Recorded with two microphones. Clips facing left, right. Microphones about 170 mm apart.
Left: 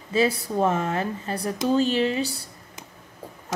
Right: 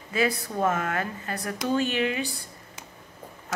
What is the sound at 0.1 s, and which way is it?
Speech, 30° left (ahead or behind).